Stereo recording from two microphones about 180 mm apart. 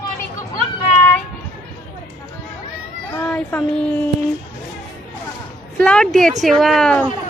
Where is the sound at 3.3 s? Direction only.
10° left (ahead or behind).